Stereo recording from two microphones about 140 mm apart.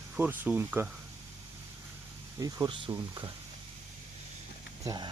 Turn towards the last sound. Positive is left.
turn(degrees=-25)  # may be behind; listen again after turning